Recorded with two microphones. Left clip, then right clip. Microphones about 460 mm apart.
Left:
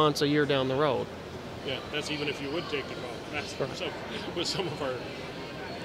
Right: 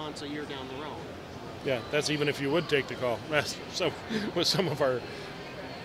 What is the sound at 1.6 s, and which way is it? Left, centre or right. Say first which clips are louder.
Speech: right 5 dB; right.